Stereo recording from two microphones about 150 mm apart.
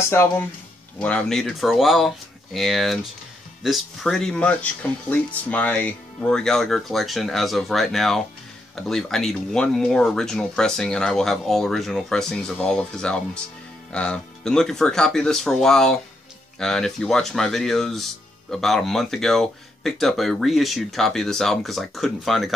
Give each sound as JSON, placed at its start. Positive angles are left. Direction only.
{"t": 0.1, "sound": "speech", "side_deg": 15}
{"t": 0.9, "sound": "speech", "side_deg": 5}